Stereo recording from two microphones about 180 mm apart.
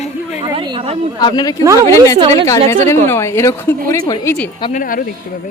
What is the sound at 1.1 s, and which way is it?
Speech, 20° left (ahead or behind).